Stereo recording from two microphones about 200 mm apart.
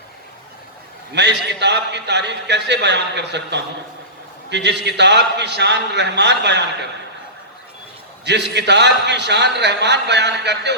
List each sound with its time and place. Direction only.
1.1 s a man's voice: 60° right (ahead or behind)
8.2 s a man's voice: 60° right (ahead or behind)